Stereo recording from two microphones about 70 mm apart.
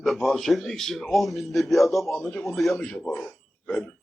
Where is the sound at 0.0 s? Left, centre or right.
Centre.